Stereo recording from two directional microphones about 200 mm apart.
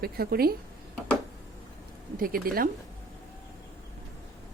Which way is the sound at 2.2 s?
45° right (ahead or behind).